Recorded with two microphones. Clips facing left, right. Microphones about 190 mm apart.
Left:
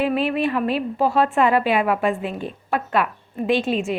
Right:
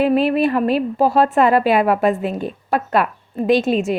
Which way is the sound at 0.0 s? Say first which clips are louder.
Right 5 dB; 40° right (ahead or behind).